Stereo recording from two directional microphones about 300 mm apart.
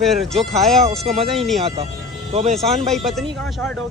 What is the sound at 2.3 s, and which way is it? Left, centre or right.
Speech, right.